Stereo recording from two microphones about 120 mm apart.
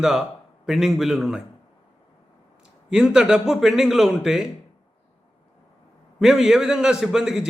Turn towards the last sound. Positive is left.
turn(degrees=-5)  # may be behind; listen again after turning